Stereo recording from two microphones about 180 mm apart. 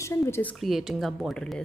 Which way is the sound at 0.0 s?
15° left (ahead or behind).